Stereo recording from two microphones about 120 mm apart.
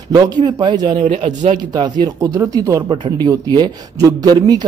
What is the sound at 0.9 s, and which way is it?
Speech, 85° right.